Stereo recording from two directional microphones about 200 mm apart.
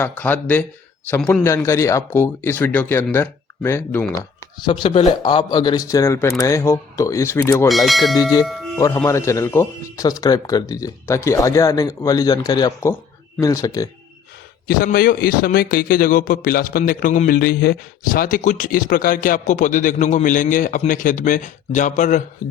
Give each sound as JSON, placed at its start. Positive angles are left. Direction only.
{"t": 0.0, "sound": "speech", "side_deg": 10}
{"t": 7.7, "sound": "speech", "side_deg": 0}
{"t": 8.1, "sound": "bell", "side_deg": 20}
{"t": 8.4, "sound": "music", "side_deg": 0}
{"t": 9.0, "sound": "speech", "side_deg": 15}
{"t": 14.7, "sound": "a man's voice", "side_deg": 45}